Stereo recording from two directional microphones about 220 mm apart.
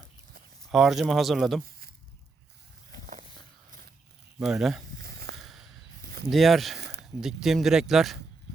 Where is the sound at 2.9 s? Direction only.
35° right (ahead or behind).